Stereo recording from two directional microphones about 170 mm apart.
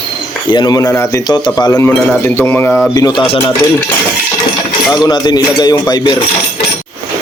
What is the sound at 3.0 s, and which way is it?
Speech, 30° left (ahead or behind).